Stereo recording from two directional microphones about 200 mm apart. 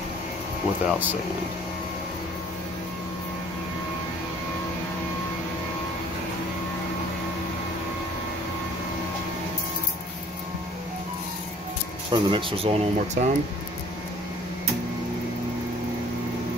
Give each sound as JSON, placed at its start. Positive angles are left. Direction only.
{"t": 0.8, "sound": "speech", "side_deg": -10}
{"t": 12.1, "sound": "speech", "side_deg": -25}